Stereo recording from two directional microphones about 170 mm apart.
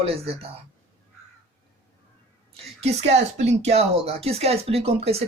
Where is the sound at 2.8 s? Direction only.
40° right (ahead or behind).